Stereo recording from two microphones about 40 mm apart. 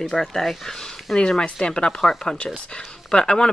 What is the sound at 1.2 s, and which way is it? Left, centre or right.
Speech, centre.